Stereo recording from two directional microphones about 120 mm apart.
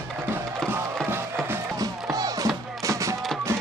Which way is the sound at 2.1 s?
30° right (ahead or behind).